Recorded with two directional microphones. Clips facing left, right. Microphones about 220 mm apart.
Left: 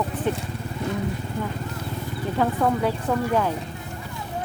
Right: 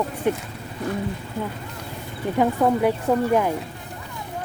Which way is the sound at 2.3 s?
15° right (ahead or behind).